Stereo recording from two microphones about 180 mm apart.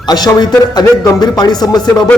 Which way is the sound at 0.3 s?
25° left (ahead or behind).